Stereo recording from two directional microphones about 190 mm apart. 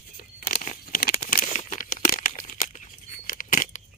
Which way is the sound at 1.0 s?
50° left (ahead or behind).